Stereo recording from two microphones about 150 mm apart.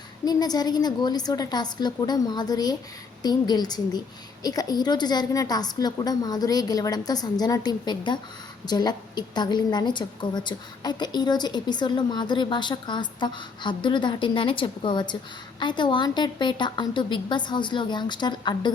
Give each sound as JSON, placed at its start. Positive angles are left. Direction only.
{"t": 0.3, "sound": "a woman's voice", "side_deg": 25}